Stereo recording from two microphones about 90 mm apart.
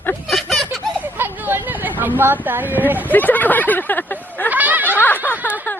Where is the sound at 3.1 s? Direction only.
20° left (ahead or behind).